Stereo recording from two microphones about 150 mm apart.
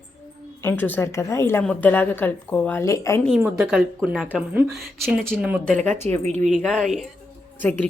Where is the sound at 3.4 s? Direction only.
10° right (ahead or behind).